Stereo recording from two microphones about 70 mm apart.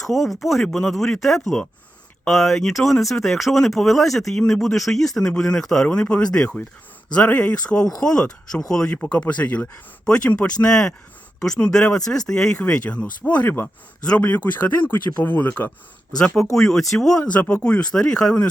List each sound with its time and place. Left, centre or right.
0.0 s speech: centre
4.4 s speech: centre
4.6 s speech: centre; by 15.7 s left
16.1 s speech: centre
17.3 s speech: centre